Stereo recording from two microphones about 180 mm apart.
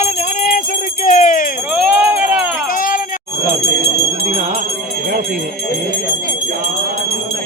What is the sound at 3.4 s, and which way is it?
Jingle bell, 55° right (ahead or behind).